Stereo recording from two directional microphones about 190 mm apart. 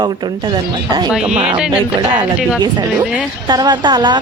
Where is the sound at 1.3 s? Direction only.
35° right (ahead or behind).